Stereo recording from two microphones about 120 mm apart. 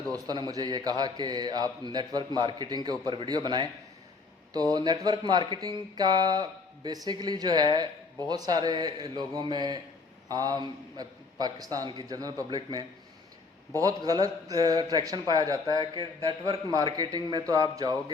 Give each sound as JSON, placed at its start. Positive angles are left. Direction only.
{"t": 0.1, "sound": "a man's voice", "side_deg": -35}